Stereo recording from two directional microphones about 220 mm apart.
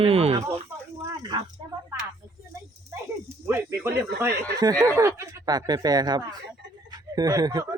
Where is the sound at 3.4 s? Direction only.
10° right (ahead or behind).